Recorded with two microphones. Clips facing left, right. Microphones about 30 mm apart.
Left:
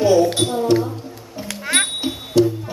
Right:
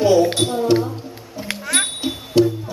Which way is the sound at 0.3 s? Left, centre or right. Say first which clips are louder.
Even; centre.